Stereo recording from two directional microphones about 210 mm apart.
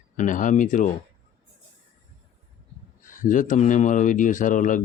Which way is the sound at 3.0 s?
35° left (ahead or behind).